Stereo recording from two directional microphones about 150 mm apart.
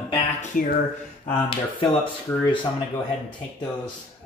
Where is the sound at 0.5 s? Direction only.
60° left (ahead or behind).